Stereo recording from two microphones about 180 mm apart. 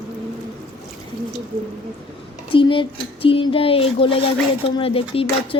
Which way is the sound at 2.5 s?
30° left (ahead or behind).